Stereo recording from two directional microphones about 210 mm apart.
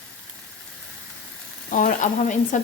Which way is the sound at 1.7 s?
40° left (ahead or behind).